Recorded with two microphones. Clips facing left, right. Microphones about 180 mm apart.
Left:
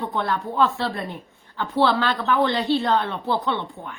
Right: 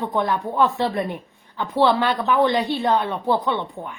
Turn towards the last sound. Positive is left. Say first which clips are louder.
# right 3 dB
turn(degrees=-15)  # may be behind; listen again after turning